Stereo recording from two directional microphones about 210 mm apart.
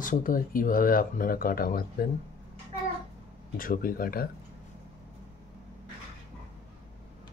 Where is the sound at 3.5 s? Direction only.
40° left (ahead or behind).